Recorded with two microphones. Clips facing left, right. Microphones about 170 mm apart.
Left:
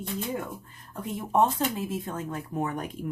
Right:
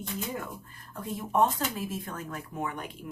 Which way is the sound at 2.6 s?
40° left (ahead or behind).